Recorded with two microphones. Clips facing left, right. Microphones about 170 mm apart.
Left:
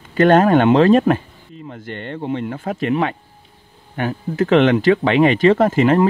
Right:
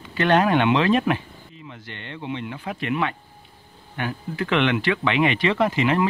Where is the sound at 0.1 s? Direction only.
45° left (ahead or behind).